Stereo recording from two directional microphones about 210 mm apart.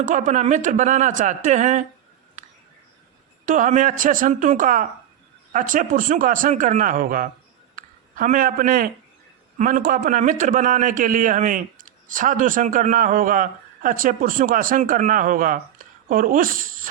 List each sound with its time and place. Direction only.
0.0 s a man's voice: 35° right (ahead or behind)
3.4 s a man's voice: 40° right (ahead or behind)